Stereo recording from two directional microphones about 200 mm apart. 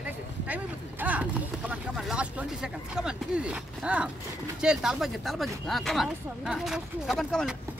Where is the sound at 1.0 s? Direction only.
5° right (ahead or behind).